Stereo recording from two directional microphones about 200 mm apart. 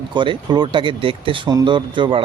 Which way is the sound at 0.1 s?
25° right (ahead or behind).